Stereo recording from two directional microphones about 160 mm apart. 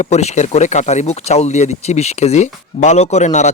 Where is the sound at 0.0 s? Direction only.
45° left (ahead or behind).